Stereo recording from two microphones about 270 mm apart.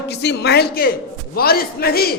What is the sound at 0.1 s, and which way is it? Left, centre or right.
A man's voice, left.